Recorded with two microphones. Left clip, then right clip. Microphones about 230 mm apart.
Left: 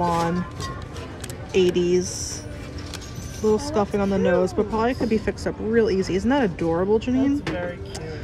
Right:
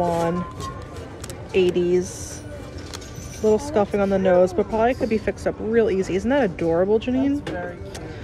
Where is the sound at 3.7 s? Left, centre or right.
Centre.